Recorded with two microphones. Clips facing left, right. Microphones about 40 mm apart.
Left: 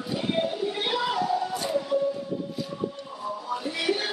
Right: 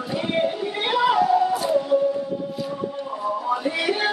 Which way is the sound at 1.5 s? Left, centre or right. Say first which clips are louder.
Right 7 dB; centre.